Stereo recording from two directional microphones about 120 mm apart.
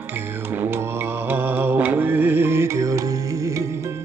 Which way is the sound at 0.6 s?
20° right (ahead or behind).